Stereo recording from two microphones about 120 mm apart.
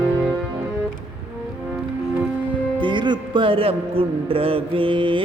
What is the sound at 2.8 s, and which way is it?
Speech, 40° right (ahead or behind).